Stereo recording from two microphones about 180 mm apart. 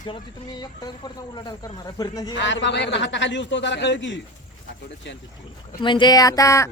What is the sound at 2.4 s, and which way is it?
A man's voice, 90° left.